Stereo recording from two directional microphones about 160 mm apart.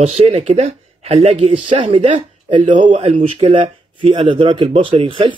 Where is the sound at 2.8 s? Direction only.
30° right (ahead or behind).